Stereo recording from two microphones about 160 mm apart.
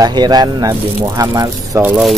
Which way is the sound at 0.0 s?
25° right (ahead or behind).